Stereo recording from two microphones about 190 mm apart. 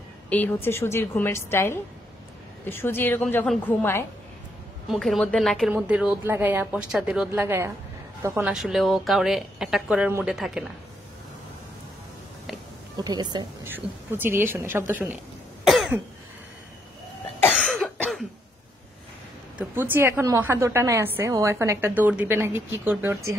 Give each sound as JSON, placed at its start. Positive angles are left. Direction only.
{"t": 0.3, "sound": "a woman's voice", "side_deg": 10}
{"t": 8.5, "sound": "speech", "side_deg": 0}
{"t": 12.9, "sound": "speech", "side_deg": -20}
{"t": 13.7, "sound": "a woman's voice", "side_deg": -10}
{"t": 15.6, "sound": "cough", "side_deg": 0}
{"t": 17.5, "sound": "cough", "side_deg": 5}
{"t": 19.6, "sound": "a woman's voice", "side_deg": -10}